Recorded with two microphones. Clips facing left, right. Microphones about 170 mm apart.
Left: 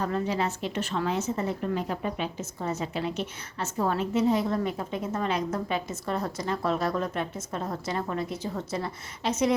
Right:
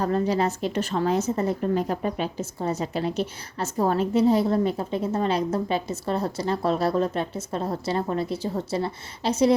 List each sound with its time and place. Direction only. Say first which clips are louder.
0.0 s a woman's voice: right 5 dB; 40° right (ahead or behind)